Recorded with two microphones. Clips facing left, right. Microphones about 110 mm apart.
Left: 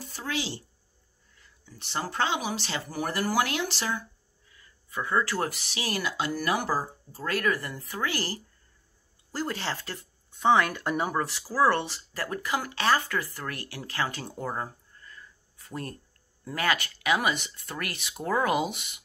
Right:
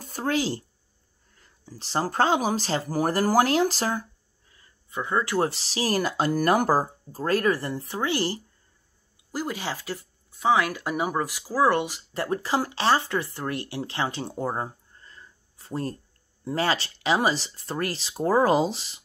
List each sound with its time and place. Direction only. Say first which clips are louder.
0.0 s speech: right 7 dB; 45° right (ahead or behind)
4.5 s a sound: even; 30° right (ahead or behind)
5.0 s speech: right 3 dB; 20° right (ahead or behind)
5.5 s speech: right 7 dB; 35° right (ahead or behind)
9.3 s speech: right 1 dB; 10° right (ahead or behind)
12.1 s speech: right 5 dB; 25° right (ahead or behind)